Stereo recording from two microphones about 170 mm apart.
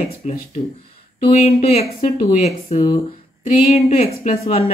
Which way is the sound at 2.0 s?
35° left (ahead or behind).